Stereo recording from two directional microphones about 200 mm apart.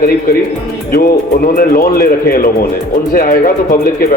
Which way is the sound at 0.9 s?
50° left (ahead or behind).